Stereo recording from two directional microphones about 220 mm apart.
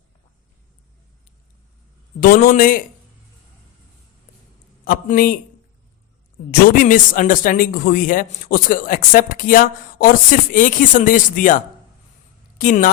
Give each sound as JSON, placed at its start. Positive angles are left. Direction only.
{"t": 2.2, "sound": "speech", "side_deg": 40}
{"t": 4.9, "sound": "speech", "side_deg": 40}
{"t": 6.5, "sound": "speech", "side_deg": 40}